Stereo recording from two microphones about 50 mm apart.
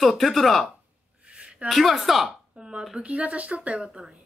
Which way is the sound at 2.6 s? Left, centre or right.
Centre.